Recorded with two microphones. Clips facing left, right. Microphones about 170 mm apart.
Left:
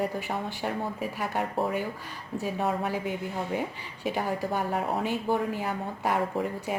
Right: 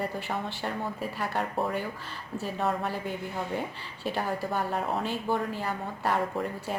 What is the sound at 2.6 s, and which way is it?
A woman's voice, 15° left (ahead or behind).